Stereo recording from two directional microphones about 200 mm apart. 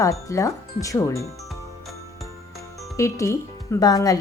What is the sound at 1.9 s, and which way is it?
Music, centre (ahead or behind).